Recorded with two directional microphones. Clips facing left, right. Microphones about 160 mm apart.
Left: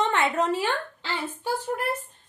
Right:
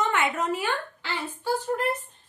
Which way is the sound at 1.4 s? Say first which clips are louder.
Right 2 dB; 15° left (ahead or behind).